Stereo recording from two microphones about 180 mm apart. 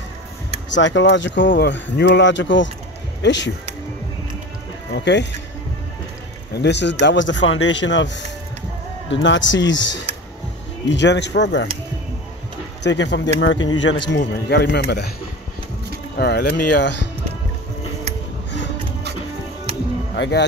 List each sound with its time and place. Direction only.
0.7 s a man's voice: 85° left
1.5 s a man's voice: 65° left (ahead or behind); by 3.5 s 85° left
4.9 s a man's voice: 75° left (ahead or behind)
6.5 s a man's voice: 70° left (ahead or behind); by 10.0 s 90° left
10.9 s a man's voice: 80° left
12.8 s a man's voice: 80° left
16.2 s speech: 65° left (ahead or behind)
20.2 s speech: 70° left (ahead or behind)